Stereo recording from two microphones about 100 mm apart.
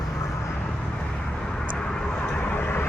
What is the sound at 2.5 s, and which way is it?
Vehicle, 20° left (ahead or behind).